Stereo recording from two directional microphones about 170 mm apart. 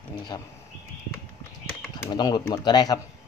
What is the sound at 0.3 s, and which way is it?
Speech, 20° left (ahead or behind).